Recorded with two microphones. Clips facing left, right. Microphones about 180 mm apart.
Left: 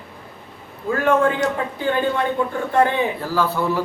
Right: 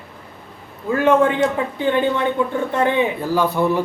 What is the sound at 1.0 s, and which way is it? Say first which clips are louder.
Speech: right 3 dB; 20° right (ahead or behind).